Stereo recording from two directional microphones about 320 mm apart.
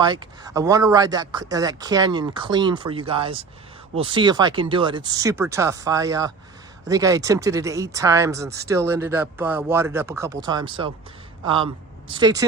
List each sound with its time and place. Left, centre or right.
0.0 s speech: centre